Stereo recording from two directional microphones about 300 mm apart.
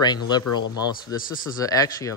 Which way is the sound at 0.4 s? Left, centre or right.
Left.